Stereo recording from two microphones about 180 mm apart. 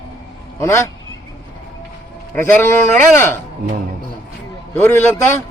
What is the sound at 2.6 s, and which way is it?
Speech, 15° left (ahead or behind).